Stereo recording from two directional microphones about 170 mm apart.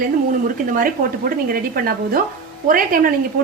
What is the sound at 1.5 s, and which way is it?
A woman's voice, 60° right (ahead or behind).